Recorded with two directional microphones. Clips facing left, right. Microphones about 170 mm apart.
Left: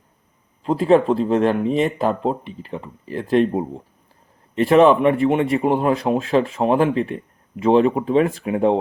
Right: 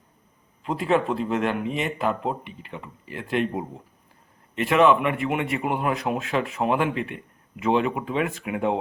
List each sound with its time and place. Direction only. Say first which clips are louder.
0.6 s speech: left 7 dB; 35° left (ahead or behind)